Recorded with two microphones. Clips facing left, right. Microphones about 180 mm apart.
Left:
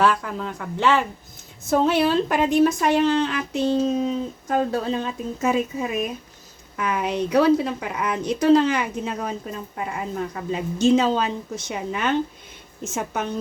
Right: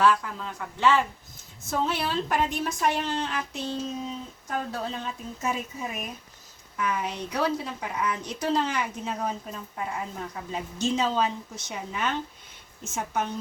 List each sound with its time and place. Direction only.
0.0 s a woman's voice: 65° left (ahead or behind); by 13.3 s 80° left